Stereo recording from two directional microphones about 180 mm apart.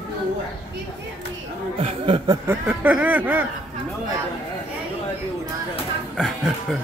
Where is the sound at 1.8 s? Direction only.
30° right (ahead or behind).